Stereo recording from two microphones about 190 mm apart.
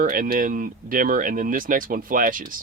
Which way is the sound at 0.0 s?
45° right (ahead or behind).